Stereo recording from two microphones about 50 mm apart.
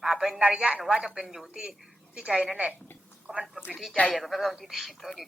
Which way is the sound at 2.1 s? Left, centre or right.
Centre.